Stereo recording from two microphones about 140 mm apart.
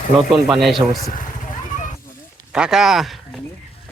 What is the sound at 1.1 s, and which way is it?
Vehicle, 70° left (ahead or behind).